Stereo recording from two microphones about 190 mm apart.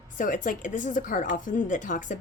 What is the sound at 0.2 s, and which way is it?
A woman's voice, 45° left (ahead or behind).